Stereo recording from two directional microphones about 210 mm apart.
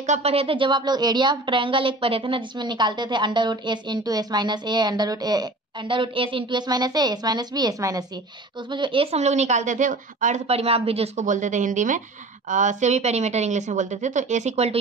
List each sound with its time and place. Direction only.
0.0 s a woman's voice: 30° right (ahead or behind)